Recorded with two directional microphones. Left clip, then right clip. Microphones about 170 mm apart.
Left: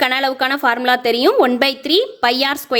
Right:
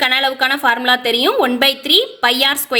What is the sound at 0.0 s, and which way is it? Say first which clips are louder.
A woman's voice: right 2 dB; 40° left (ahead or behind).